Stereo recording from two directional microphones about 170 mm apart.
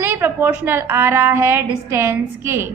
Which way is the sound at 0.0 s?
15° right (ahead or behind).